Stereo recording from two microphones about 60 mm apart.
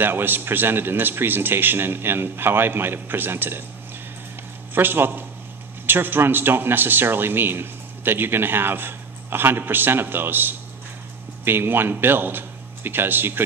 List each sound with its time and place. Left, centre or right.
0.0 s a man's voice: right
4.7 s a man's voice: right